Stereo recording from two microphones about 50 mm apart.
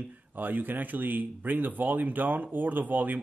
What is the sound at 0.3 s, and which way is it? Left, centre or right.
Speech, right.